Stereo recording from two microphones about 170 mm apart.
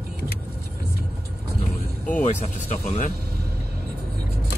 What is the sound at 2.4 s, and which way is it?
Speech, 40° left (ahead or behind).